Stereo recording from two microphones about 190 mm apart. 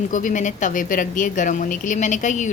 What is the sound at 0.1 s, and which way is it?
A woman's voice, 45° left (ahead or behind).